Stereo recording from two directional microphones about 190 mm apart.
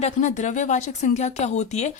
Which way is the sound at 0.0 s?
40° left (ahead or behind).